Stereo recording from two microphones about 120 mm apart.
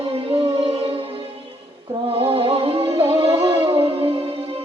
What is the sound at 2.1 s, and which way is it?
Music, 50° right (ahead or behind).